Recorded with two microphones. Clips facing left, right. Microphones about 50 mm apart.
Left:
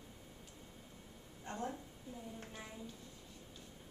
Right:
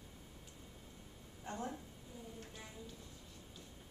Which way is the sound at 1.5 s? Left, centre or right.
Centre.